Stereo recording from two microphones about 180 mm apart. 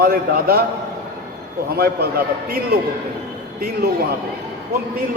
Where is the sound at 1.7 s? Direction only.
60° right (ahead or behind).